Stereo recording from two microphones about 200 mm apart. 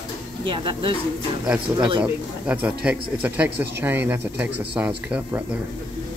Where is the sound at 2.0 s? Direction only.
5° right (ahead or behind).